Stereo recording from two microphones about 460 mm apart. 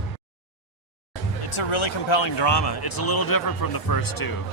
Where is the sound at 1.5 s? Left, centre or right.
Left.